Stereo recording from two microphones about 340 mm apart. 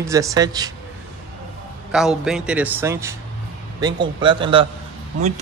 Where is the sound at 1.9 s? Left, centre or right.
Centre.